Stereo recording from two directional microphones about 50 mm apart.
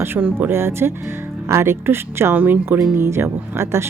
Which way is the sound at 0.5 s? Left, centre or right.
Right.